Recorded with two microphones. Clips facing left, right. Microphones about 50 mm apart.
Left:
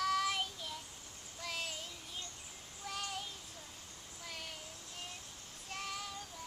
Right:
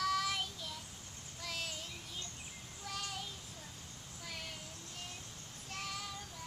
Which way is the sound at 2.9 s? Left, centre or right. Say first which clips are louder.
Left 1 dB; centre.